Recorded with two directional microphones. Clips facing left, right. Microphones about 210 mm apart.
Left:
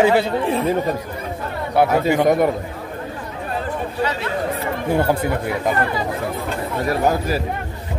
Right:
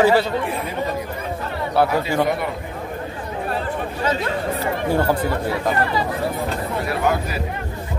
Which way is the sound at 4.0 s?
45° right (ahead or behind).